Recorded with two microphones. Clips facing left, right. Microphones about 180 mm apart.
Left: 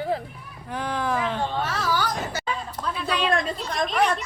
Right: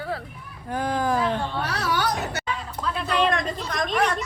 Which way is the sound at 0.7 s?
40° right (ahead or behind).